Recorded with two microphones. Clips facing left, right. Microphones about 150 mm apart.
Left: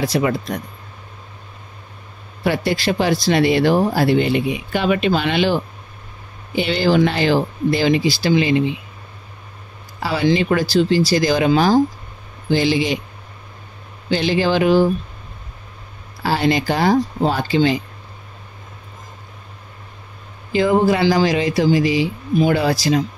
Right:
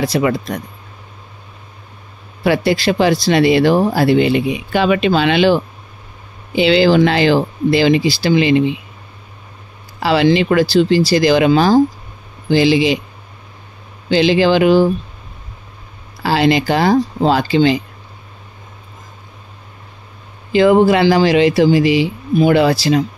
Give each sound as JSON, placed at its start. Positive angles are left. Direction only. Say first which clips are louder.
{"t": 0.1, "sound": "speech", "louder": "right 3 dB", "side_deg": -90}
{"t": 2.4, "sound": "speech", "louder": "right 5 dB", "side_deg": -90}
{"t": 10.0, "sound": "speech", "louder": "right 5 dB", "side_deg": -80}
{"t": 14.1, "sound": "speech", "louder": "right 5 dB", "side_deg": -90}
{"t": 16.2, "sound": "speech", "louder": "right 4 dB", "side_deg": -90}
{"t": 20.5, "sound": "speech", "louder": "right 5 dB", "side_deg": -75}